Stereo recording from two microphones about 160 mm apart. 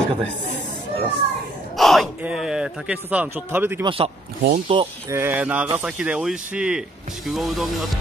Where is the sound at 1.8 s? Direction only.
Centre (ahead or behind).